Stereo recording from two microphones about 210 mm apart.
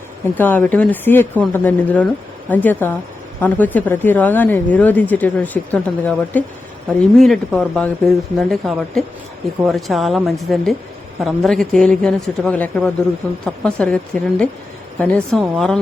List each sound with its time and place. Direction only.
0.3 s speech: 10° left (ahead or behind)